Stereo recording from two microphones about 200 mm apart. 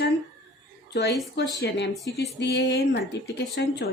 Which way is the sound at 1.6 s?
55° left (ahead or behind).